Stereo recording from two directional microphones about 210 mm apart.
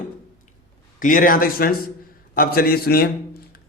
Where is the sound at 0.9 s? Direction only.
40° left (ahead or behind).